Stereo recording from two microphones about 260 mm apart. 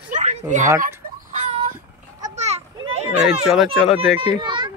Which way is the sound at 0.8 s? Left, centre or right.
Right.